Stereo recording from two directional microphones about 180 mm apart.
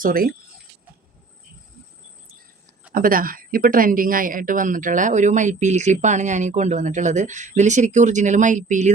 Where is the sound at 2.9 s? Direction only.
50° right (ahead or behind).